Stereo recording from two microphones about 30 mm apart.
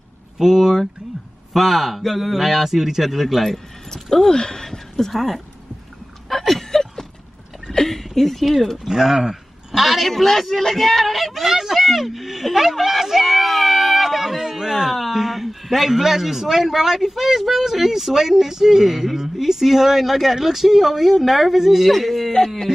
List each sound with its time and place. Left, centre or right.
0.4 s a man's voice: centre
3.3 s a man's voice: centre
6.2 s a sound: centre
7.9 s speech: centre
8.8 s a man's voice: centre
12.5 s a sound: centre
15.0 s a man's voice: centre